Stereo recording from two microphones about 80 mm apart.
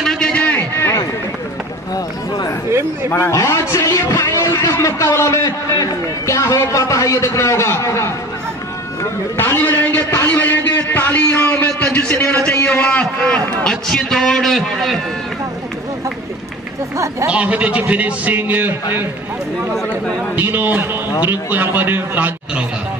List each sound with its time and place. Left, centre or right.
0.0 s a sound: centre
0.3 s a sound: centre
3.1 s speech: left
9.4 s a man's voice: left
13.7 s a man's voice: centre
17.3 s a man's voice: centre
20.3 s a man's voice: right